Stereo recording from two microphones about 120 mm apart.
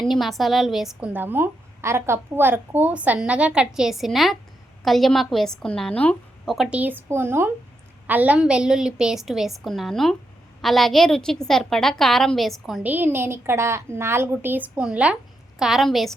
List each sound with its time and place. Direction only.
0.0 s a woman's voice: centre (ahead or behind)
1.1 s a woman's voice: 15° right (ahead or behind); by 6.7 s 5° left (ahead or behind)
6.7 s a woman's voice: 15° right (ahead or behind)
12.8 s a woman's voice: 15° right (ahead or behind); by 16.1 s centre (ahead or behind)